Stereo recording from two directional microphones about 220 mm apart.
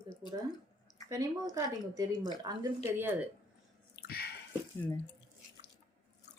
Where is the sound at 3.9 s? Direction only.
45° left (ahead or behind).